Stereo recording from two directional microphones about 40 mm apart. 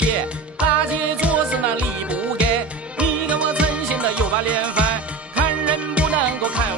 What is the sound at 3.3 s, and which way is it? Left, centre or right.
Music, right.